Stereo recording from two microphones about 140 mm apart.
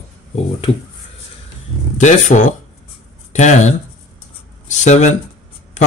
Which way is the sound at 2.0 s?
60° left (ahead or behind).